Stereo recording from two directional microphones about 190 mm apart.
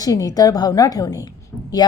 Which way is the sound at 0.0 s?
20° left (ahead or behind).